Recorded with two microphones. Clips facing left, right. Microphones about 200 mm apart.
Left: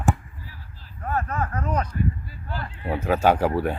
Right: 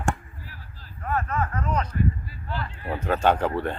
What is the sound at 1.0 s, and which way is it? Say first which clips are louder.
Speech: even; 35° left (ahead or behind).